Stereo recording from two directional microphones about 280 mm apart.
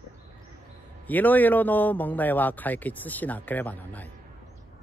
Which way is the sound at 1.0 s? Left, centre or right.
Centre.